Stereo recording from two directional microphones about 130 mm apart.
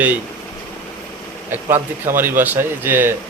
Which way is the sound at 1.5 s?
20° right (ahead or behind).